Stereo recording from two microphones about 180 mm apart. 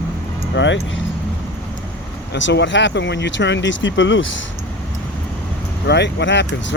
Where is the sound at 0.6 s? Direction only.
90° left.